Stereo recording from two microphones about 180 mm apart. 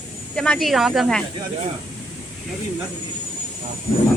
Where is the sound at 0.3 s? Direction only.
5° left (ahead or behind).